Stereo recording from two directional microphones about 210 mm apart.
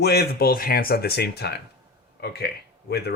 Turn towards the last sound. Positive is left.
turn(degrees=50)  # may be behind; listen again after turning